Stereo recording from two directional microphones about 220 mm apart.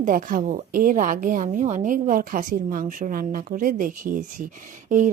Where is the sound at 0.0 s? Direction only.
35° right (ahead or behind).